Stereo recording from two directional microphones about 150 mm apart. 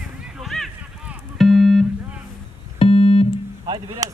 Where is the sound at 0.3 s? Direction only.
Centre (ahead or behind).